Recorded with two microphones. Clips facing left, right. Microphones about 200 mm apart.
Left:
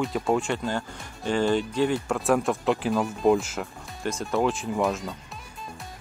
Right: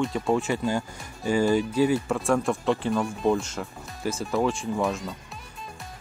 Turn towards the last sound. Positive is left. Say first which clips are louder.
# left 1 dB
turn(degrees=0)  # may be behind; listen again after turning